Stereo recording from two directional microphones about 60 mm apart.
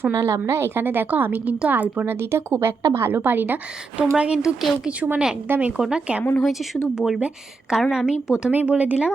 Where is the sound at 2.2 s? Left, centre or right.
Right.